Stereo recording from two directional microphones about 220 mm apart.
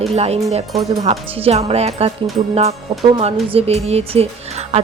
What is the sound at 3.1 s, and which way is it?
Speech, 25° right (ahead or behind).